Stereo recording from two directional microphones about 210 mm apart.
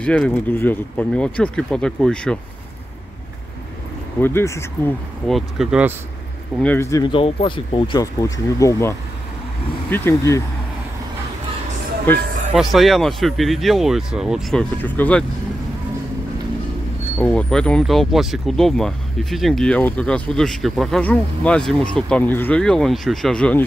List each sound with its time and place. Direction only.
0.0 s speech: 5° left (ahead or behind)
4.2 s speech: 10° left (ahead or behind)
5.3 s speech: centre (ahead or behind)
6.6 s speech: 10° left (ahead or behind)
12.1 s speech: 10° left (ahead or behind)
17.2 s speech: 5° left (ahead or behind)